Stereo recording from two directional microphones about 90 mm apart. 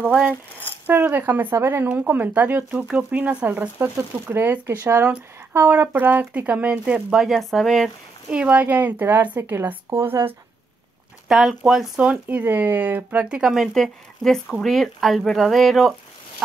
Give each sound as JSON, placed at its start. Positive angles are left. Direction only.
{"t": 0.8, "sound": "speech", "side_deg": -20}
{"t": 8.3, "sound": "speech", "side_deg": -15}
{"t": 11.2, "sound": "speech", "side_deg": -5}
{"t": 12.1, "sound": "speech", "side_deg": -15}